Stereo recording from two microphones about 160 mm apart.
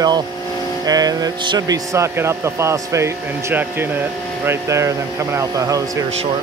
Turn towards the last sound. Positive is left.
turn(degrees=-20)  # may be behind; listen again after turning